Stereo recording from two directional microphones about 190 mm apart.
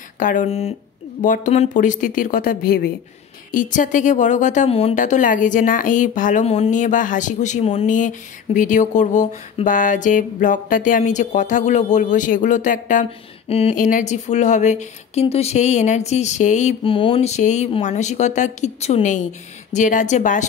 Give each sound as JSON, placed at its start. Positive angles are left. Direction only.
{"t": 0.2, "sound": "a woman's voice", "side_deg": 45}
{"t": 13.5, "sound": "speech", "side_deg": 30}
{"t": 13.7, "sound": "speech", "side_deg": 45}